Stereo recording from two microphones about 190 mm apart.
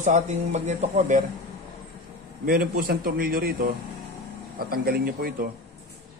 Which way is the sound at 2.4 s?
50° right (ahead or behind).